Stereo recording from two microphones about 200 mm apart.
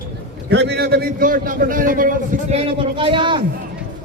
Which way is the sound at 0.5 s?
55° right (ahead or behind).